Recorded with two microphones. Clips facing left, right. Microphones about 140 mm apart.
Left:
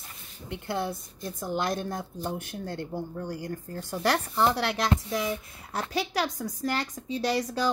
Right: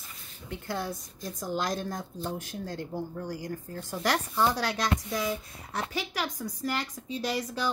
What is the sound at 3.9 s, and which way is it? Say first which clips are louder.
Speech: left 2 dB; 25° left (ahead or behind).